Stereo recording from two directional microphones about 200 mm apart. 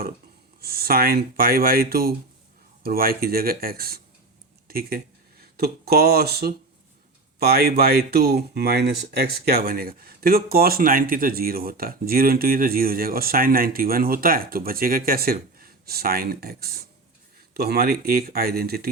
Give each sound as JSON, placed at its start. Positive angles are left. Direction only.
{"t": 0.6, "sound": "speech", "side_deg": -50}